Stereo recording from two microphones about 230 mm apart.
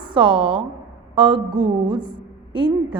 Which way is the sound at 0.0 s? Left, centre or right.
Right.